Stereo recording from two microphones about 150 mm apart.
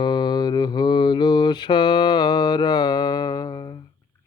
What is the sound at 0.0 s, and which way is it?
Mantra, 30° left (ahead or behind).